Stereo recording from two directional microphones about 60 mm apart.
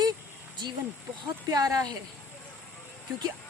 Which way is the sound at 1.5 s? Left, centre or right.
Right.